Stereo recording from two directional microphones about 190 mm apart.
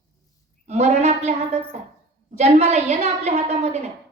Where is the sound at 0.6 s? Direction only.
35° right (ahead or behind).